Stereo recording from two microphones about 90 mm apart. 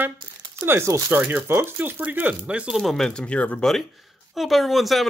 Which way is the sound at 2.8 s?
5° left (ahead or behind).